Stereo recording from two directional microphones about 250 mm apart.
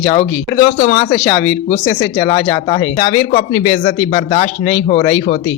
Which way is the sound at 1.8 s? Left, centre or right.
Centre.